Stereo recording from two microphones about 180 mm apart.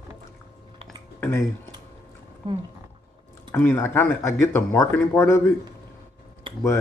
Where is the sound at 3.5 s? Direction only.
10° left (ahead or behind).